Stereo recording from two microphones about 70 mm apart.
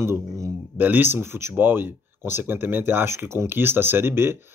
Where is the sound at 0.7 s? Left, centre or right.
Right.